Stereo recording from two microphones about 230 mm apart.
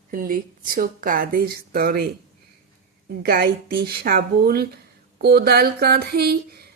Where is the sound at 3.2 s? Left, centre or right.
Right.